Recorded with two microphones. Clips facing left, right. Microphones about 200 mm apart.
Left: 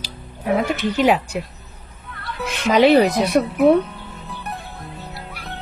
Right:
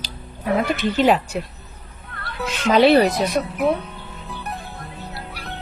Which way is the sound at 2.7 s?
15° left (ahead or behind).